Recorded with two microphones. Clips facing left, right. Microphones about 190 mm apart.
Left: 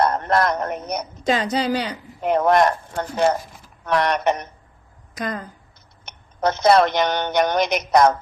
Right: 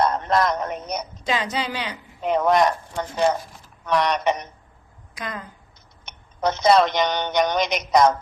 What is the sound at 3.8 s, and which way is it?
Speech, 55° left (ahead or behind).